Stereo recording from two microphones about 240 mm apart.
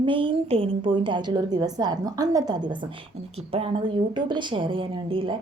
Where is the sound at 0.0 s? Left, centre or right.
Right.